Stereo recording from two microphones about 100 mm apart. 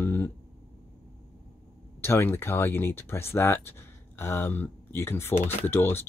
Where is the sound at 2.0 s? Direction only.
25° left (ahead or behind).